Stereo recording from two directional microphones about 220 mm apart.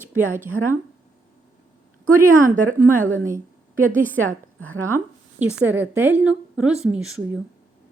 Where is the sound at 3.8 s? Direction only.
35° right (ahead or behind).